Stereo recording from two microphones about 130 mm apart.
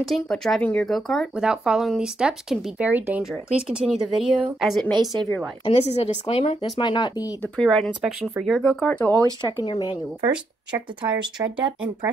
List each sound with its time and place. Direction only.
0.0 s speech: centre (ahead or behind)
5.1 s speech: 5° left (ahead or behind)
5.7 s a woman's voice: 55° left (ahead or behind)
6.8 s speech: 35° left (ahead or behind)
7.4 s speech: 5° left (ahead or behind)
9.4 s speech: 35° left (ahead or behind)
11.3 s speech: 35° right (ahead or behind)